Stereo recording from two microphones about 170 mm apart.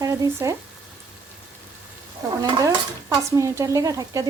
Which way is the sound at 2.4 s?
20° right (ahead or behind).